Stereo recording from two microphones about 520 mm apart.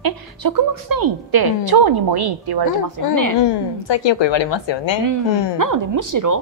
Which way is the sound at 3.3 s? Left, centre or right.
Left.